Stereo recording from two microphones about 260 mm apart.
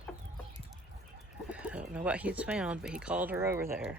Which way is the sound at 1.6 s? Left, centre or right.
Centre.